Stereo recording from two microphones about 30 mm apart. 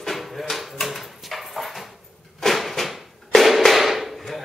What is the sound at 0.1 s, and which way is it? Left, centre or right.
Dog, centre.